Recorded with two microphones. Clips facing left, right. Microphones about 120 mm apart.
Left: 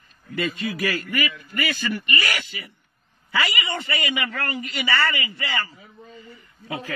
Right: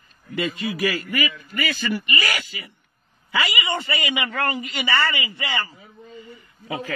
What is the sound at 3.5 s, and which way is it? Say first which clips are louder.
A man's voice: right 2 dB; 25° right (ahead or behind).